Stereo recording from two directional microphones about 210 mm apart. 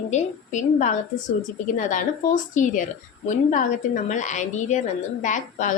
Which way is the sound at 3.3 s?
35° left (ahead or behind).